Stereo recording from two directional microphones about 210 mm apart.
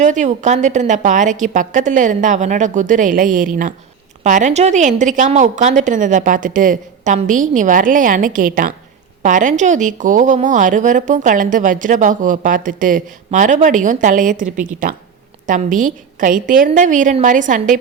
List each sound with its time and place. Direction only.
0.0 s a woman's voice: 35° right (ahead or behind)